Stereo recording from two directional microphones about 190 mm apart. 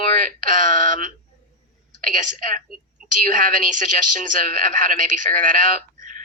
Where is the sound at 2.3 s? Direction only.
45° right (ahead or behind).